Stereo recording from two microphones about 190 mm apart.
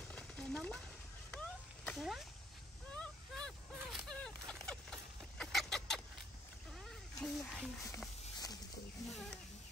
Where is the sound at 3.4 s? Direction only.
5° left (ahead or behind).